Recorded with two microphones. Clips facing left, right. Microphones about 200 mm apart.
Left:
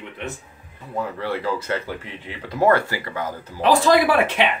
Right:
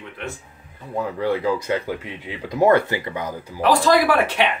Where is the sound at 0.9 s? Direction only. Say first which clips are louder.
Right 3 dB; 15° right (ahead or behind).